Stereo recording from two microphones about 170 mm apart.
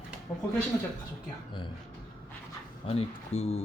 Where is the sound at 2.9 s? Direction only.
35° left (ahead or behind).